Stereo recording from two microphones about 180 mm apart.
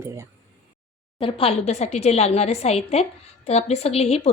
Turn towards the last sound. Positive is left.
turn(degrees=35)  # may be behind; listen again after turning